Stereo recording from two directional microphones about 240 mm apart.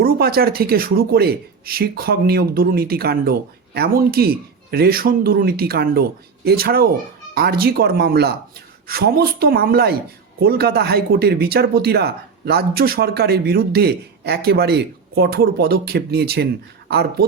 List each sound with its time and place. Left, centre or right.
0.0 s speech: right